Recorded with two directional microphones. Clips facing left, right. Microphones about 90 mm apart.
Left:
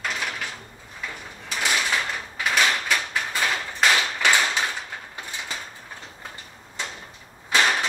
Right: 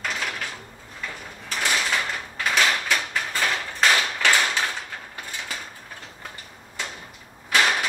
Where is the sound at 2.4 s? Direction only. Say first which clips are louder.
Even; centre (ahead or behind).